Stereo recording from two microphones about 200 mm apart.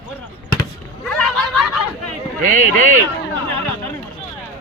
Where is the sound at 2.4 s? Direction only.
40° right (ahead or behind).